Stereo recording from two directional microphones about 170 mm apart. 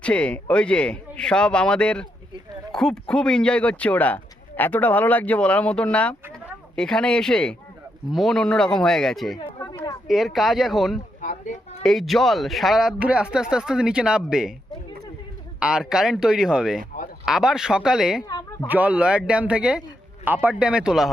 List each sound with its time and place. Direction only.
0.0 s speech: 5° left (ahead or behind)
9.4 s chatter: 25° left (ahead or behind)
10.1 s speech: centre (ahead or behind)
15.6 s speech: 5° right (ahead or behind)
18.3 s a sound: 20° left (ahead or behind)
18.7 s a man's voice: 10° right (ahead or behind)